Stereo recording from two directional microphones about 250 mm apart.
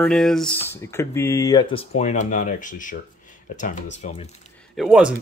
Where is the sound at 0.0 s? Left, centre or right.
Centre; by 4.5 s left.